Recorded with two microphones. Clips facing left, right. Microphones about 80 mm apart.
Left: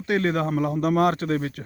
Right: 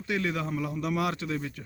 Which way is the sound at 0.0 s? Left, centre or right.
Left.